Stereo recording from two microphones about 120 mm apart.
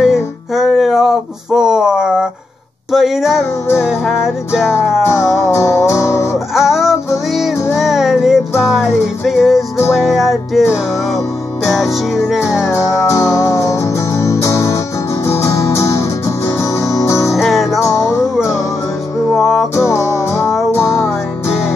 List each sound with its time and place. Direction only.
0.0 s music: centre (ahead or behind)
5.0 s music: 25° left (ahead or behind)
6.5 s music: 5° right (ahead or behind)
12.7 s music: 25° left (ahead or behind)
17.4 s music: centre (ahead or behind)
17.9 s music: 25° left (ahead or behind)
19.3 s music: centre (ahead or behind)
19.7 s music: 25° left (ahead or behind)